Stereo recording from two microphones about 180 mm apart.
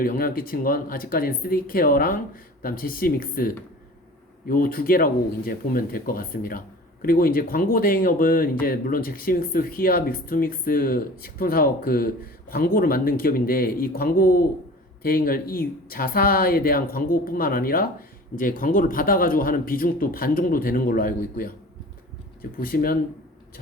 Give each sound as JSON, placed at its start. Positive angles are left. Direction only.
{"t": 0.0, "sound": "speech", "side_deg": 50}